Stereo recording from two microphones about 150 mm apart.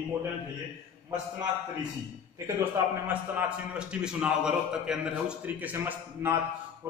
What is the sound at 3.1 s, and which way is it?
A man's voice, 10° right (ahead or behind).